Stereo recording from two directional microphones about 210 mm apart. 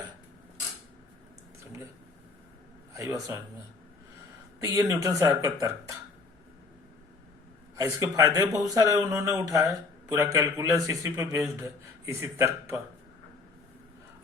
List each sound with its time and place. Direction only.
2.9 s a man's voice: 15° right (ahead or behind)
4.6 s speech: 15° right (ahead or behind)
7.8 s speech: 15° right (ahead or behind)